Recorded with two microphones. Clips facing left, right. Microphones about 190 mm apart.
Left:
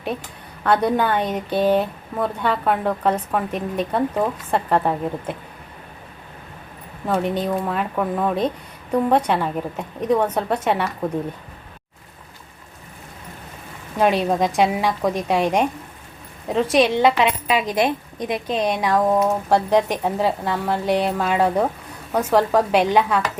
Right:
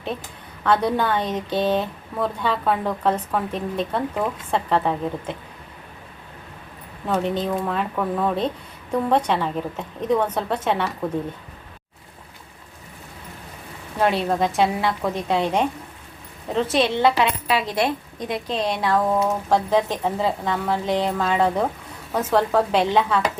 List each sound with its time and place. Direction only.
0.6 s a woman's voice: 10° left (ahead or behind)
7.1 s a woman's voice: 10° left (ahead or behind)
14.0 s a woman's voice: 15° left (ahead or behind)